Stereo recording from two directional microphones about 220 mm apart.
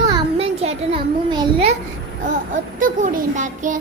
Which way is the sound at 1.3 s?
20° right (ahead or behind).